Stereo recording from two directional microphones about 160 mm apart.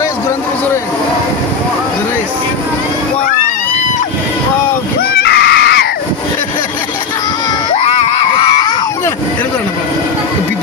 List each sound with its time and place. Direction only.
5.1 s screaming: 90° left
7.8 s screaming: 45° left (ahead or behind)